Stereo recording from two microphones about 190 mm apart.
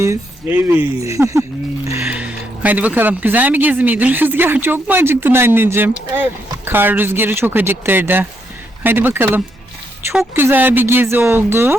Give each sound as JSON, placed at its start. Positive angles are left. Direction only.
{"t": 0.0, "sound": "speech", "side_deg": -15}